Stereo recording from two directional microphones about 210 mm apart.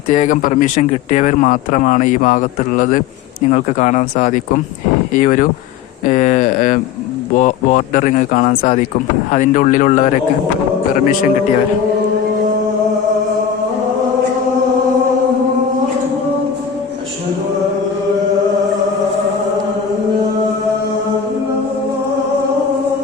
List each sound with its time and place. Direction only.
0.1 s speech: 35° left (ahead or behind)